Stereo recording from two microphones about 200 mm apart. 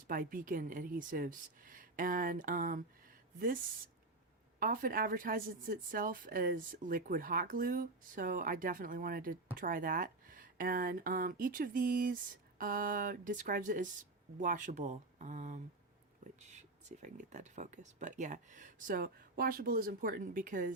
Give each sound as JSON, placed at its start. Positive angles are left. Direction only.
{"t": 0.1, "sound": "a woman's voice", "side_deg": -45}
{"t": 4.6, "sound": "a woman's voice", "side_deg": -45}